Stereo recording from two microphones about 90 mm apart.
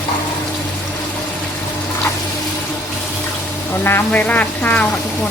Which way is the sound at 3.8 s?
25° left (ahead or behind).